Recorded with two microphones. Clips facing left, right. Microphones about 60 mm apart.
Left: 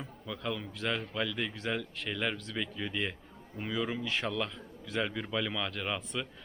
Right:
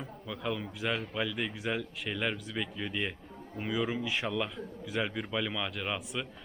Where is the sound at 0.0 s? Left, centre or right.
Centre.